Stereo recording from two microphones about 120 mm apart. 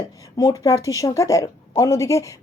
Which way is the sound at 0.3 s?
30° left (ahead or behind).